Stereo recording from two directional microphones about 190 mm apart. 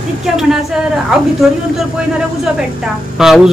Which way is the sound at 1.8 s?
Centre (ahead or behind).